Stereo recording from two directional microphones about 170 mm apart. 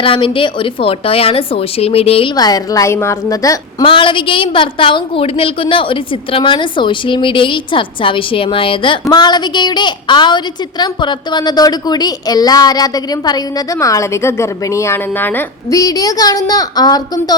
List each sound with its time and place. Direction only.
0.0 s a woman's voice: 30° left (ahead or behind)
2.3 s a woman's voice: 20° left (ahead or behind)